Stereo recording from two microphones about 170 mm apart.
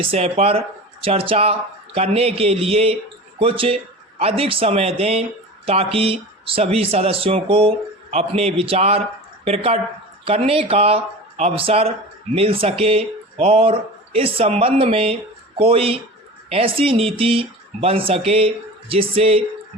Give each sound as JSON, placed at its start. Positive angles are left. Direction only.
{"t": 0.1, "sound": "speech", "side_deg": -35}